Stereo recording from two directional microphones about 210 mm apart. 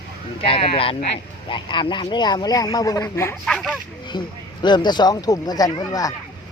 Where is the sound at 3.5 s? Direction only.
5° left (ahead or behind).